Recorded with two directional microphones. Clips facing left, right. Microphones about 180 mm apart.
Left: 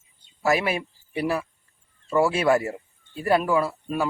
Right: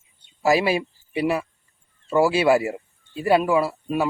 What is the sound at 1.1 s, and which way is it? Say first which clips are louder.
Speech: right 3 dB; 15° right (ahead or behind).